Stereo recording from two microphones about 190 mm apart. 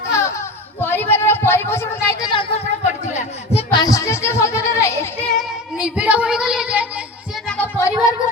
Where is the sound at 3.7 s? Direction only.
20° left (ahead or behind); by 7.0 s 5° right (ahead or behind).